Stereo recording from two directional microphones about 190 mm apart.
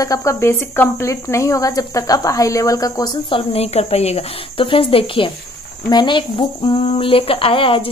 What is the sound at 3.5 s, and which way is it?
Speech, 35° left (ahead or behind).